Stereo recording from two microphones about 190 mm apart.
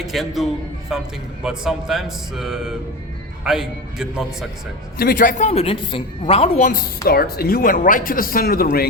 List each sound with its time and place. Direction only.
0.0 s speech: centre (ahead or behind)
4.9 s speech: 50° left (ahead or behind)
5.5 s a woman's voice: 30° left (ahead or behind)
7.1 s speech: 55° left (ahead or behind)